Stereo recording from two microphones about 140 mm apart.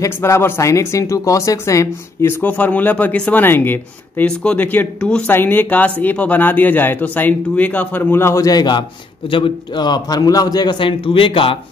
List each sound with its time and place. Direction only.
0.0 s a man's voice: 20° left (ahead or behind); by 11.5 s 40° left (ahead or behind)